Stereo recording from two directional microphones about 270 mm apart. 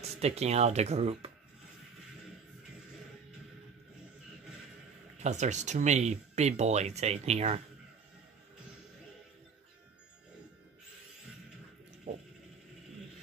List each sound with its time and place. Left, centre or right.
0.2 s speech: right
5.2 s speech: right